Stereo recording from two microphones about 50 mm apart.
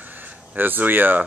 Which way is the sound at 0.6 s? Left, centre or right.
Right.